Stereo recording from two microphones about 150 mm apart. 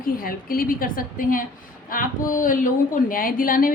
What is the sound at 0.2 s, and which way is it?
A woman's voice, 75° left (ahead or behind).